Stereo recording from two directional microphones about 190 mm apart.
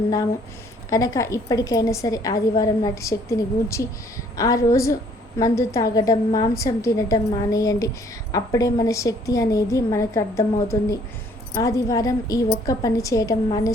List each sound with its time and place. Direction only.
0.9 s a woman's voice: 20° left (ahead or behind)